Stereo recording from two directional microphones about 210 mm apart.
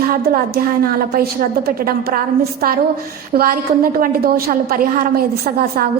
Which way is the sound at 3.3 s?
40° right (ahead or behind).